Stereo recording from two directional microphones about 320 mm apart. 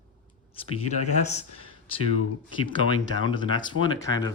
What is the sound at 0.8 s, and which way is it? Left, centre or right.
Speech, left.